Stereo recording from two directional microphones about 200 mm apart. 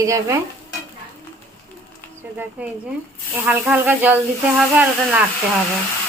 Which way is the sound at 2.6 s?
5° right (ahead or behind).